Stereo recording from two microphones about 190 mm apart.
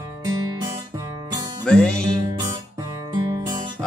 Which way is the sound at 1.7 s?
5° left (ahead or behind).